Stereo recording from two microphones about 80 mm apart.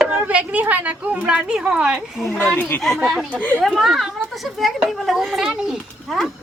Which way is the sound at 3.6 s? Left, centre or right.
Centre.